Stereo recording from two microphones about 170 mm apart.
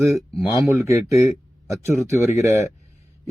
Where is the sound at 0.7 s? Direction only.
15° right (ahead or behind).